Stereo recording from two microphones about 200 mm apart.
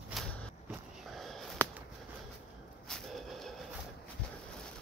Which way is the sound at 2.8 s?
Centre (ahead or behind).